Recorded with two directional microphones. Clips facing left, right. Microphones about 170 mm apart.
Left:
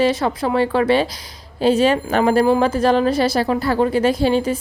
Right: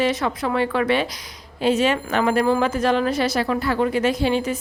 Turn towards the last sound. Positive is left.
turn(degrees=35)  # may be behind; listen again after turning